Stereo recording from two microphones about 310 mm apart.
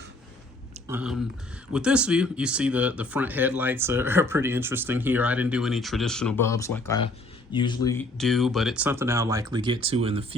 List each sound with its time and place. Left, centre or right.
0.9 s speech: centre